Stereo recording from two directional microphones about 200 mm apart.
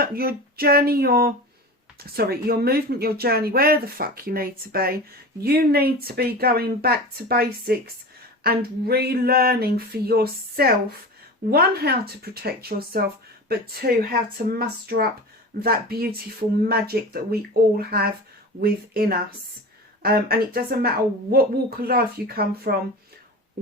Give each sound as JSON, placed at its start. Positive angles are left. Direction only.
{"t": 0.0, "sound": "speech", "side_deg": -50}